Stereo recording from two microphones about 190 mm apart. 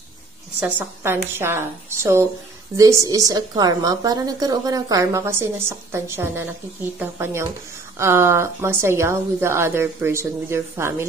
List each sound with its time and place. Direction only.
0.7 s a woman's voice: 10° right (ahead or behind)